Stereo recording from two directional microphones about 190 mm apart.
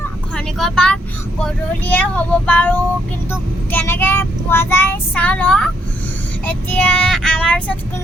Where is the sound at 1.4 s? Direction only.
10° left (ahead or behind).